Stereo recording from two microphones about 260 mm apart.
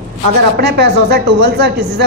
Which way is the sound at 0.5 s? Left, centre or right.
Right.